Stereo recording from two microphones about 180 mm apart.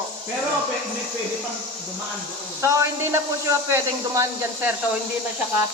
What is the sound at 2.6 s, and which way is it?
A man's voice, 15° right (ahead or behind).